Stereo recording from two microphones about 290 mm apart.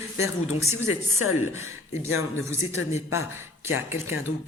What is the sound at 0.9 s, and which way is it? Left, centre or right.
Speech, left.